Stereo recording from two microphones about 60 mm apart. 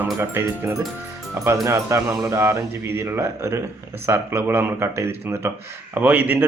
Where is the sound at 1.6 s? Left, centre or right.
Right.